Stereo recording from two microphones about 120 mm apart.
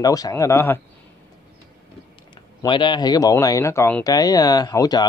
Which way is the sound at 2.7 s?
40° left (ahead or behind).